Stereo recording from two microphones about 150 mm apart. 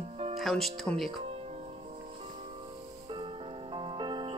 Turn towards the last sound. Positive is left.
turn(degrees=-30)  # may be behind; listen again after turning